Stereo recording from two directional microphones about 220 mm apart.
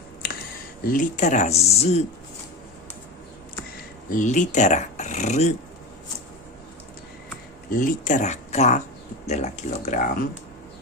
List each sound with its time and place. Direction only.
0.9 s speech: 35° left (ahead or behind)
4.1 s speech: 35° left (ahead or behind)
7.7 s speech: 35° left (ahead or behind)